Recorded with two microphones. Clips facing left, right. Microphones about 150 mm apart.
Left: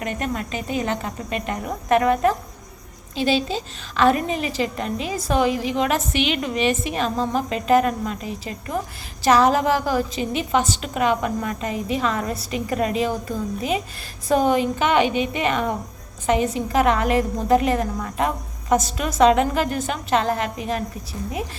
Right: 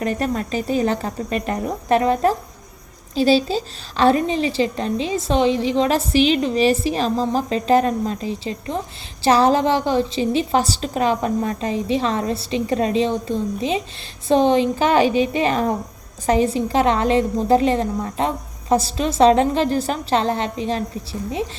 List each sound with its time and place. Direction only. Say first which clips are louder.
0.0 s a woman's voice: right 4 dB; 35° right (ahead or behind)